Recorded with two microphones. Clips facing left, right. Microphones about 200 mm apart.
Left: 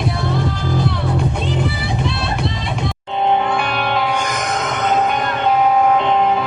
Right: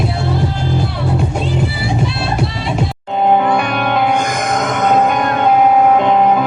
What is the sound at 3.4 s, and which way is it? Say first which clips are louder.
Music: right 4 dB; 50° right (ahead or behind).